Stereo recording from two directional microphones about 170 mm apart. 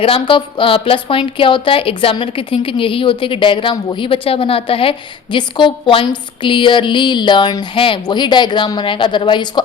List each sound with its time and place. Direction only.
0.0 s a woman's voice: 30° left (ahead or behind)